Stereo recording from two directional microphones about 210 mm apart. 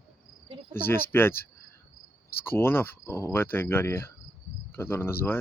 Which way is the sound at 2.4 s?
10° left (ahead or behind).